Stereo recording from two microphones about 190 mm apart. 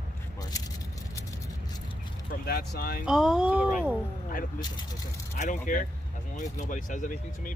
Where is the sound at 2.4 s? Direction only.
55° left (ahead or behind).